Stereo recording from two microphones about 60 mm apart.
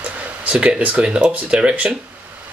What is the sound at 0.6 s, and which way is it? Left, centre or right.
Speech, centre.